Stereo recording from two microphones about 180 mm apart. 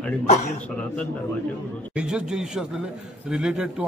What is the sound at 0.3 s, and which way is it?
Speech, 40° left (ahead or behind).